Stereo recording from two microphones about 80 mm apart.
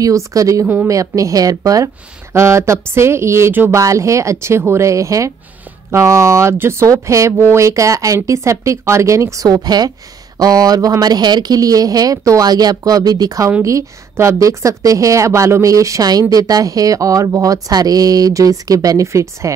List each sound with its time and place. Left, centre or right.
0.0 s speech: right
2.3 s speech: right
3.7 s speech: right
13.7 s speech: right